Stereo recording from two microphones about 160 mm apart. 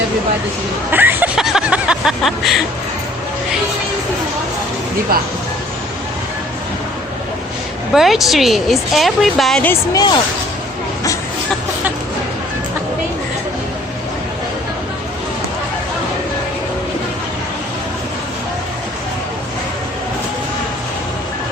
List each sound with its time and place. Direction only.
0.9 s a sound: 10° right (ahead or behind)
7.9 s speech: centre (ahead or behind)
9.9 s speech: 25° left (ahead or behind)